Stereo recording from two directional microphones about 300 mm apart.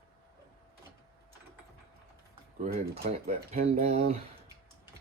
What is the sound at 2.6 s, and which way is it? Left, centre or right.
Speech, right.